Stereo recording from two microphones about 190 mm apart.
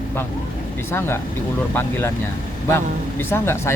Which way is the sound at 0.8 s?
10° left (ahead or behind).